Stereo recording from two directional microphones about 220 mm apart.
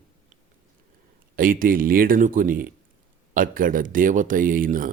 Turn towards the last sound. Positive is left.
turn(degrees=-40)  # may be behind; listen again after turning